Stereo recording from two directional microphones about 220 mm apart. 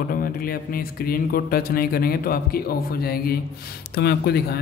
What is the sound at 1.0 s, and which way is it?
Speech, 40° left (ahead or behind).